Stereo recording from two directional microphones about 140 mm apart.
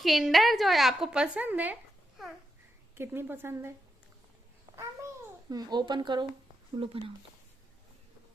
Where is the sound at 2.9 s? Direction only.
15° right (ahead or behind).